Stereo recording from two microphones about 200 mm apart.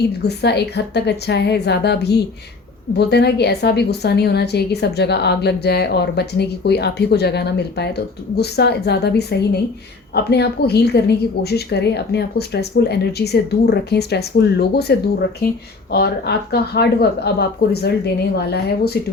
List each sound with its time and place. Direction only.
0.2 s a woman's voice: 55° left (ahead or behind)